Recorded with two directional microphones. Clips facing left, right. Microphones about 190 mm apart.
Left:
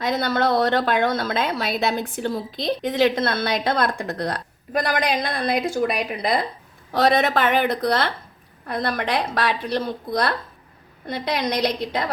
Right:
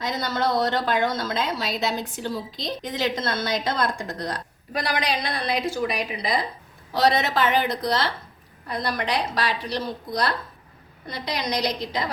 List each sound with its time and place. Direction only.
0.0 s a woman's voice: 60° left (ahead or behind)